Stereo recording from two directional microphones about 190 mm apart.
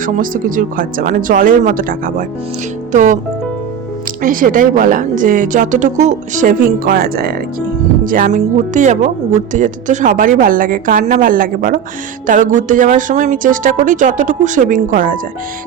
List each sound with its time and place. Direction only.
0.0 s speech: 45° right (ahead or behind)
4.2 s speech: 45° right (ahead or behind)